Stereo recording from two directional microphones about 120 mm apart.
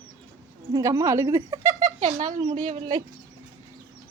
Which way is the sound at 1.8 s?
65° right (ahead or behind).